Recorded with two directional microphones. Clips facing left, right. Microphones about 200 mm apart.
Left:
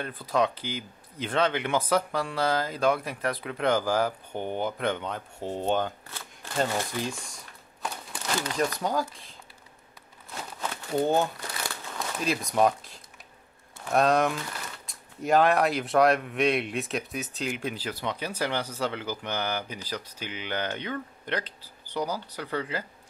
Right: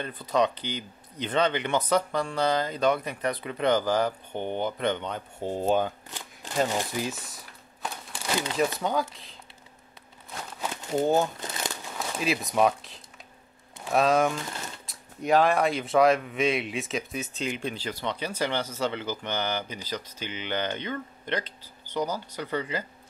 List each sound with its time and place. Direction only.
0.0 s speech: centre (ahead or behind)
6.0 s shuffling cards: 15° right (ahead or behind)
6.7 s speech: 10° right (ahead or behind)
8.5 s speech: centre (ahead or behind)
10.6 s a sound: 20° right (ahead or behind)
11.3 s crumpling: 20° right (ahead or behind)
12.2 s speech: 5° right (ahead or behind)